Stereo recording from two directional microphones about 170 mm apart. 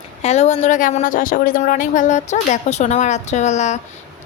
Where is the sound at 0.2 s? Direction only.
40° left (ahead or behind).